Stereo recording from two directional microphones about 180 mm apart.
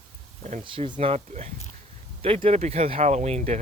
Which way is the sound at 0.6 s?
25° right (ahead or behind).